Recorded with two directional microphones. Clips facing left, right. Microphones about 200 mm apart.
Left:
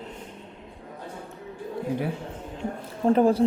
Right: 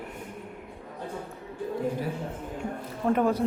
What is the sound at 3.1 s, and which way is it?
Speech, 30° left (ahead or behind).